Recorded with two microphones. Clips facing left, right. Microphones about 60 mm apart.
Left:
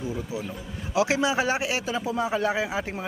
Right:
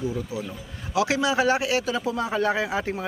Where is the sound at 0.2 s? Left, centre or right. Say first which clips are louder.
Right 1 dB; left.